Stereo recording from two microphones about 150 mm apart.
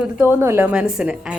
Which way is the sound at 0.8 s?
5° right (ahead or behind).